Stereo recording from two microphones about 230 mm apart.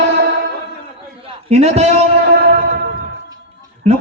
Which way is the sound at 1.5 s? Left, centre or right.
Right.